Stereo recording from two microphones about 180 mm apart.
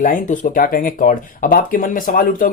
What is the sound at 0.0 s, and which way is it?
Speech, 45° left (ahead or behind).